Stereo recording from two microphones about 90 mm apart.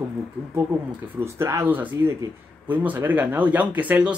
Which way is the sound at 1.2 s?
30° right (ahead or behind).